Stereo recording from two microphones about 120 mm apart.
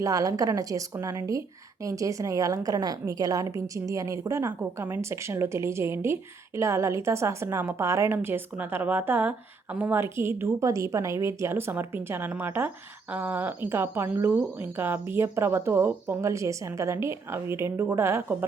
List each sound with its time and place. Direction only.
0.0 s speech: 30° right (ahead or behind)